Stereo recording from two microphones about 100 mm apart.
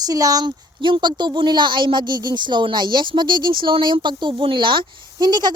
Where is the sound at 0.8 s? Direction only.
50° right (ahead or behind).